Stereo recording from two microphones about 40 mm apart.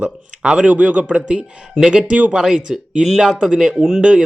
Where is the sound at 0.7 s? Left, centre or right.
Right.